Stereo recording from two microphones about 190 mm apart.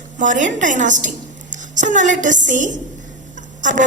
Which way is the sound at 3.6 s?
40° right (ahead or behind).